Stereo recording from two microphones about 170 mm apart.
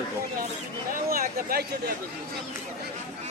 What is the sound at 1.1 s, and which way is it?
Speech, 60° right (ahead or behind).